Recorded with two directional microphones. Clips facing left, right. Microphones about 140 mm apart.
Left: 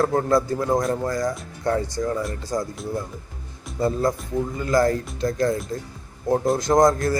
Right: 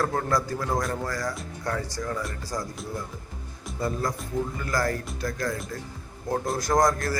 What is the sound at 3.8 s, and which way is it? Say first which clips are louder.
A man's voice: left 7 dB; 25° left (ahead or behind).